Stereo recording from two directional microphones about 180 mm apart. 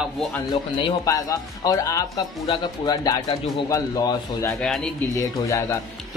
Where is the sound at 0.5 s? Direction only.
20° left (ahead or behind).